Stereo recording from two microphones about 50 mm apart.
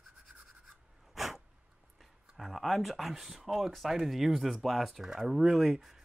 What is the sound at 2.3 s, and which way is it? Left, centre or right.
Speech, centre.